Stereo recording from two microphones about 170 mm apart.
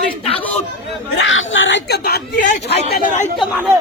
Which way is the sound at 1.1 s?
90° left.